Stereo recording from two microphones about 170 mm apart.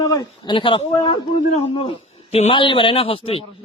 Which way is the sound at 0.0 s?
20° left (ahead or behind).